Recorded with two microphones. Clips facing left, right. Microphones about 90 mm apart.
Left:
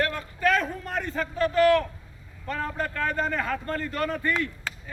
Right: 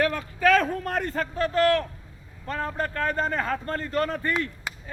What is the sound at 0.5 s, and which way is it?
Speech, 85° right.